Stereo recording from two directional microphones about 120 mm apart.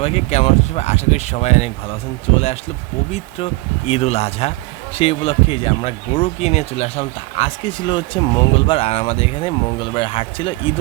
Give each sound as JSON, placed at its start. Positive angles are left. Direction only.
{"t": 0.0, "sound": "speech", "side_deg": 65}